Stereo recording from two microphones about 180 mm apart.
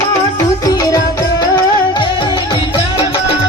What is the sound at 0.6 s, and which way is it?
Music, 20° left (ahead or behind).